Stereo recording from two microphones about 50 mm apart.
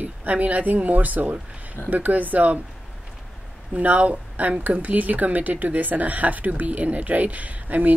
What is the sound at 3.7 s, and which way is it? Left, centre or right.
Speech, right.